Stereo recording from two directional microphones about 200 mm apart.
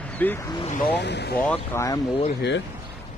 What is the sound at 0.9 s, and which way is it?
Speech, 60° left (ahead or behind).